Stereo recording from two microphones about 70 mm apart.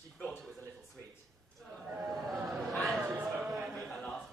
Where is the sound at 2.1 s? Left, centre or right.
Centre.